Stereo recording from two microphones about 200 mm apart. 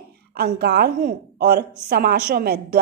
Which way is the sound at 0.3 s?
50° right (ahead or behind).